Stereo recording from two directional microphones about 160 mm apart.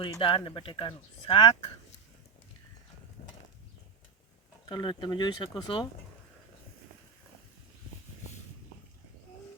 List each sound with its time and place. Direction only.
0.0 s speech: 30° left (ahead or behind)
4.7 s speech: 30° left (ahead or behind)